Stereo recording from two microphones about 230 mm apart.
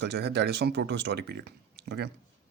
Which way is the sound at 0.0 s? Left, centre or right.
Right.